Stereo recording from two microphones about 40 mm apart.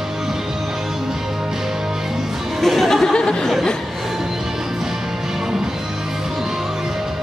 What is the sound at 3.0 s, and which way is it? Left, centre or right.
Speech, centre.